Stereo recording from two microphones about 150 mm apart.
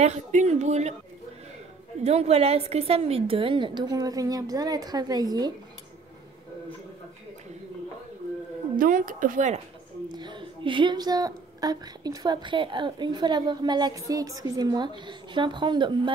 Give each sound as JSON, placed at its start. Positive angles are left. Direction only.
{"t": 0.0, "sound": "a woman's voice", "side_deg": -50}
{"t": 2.0, "sound": "a woman's voice", "side_deg": -45}
{"t": 8.7, "sound": "a woman's voice", "side_deg": -65}
{"t": 10.0, "sound": "a woman's voice", "side_deg": -30}